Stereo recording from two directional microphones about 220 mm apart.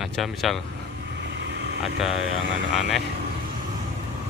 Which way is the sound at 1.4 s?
50° right (ahead or behind).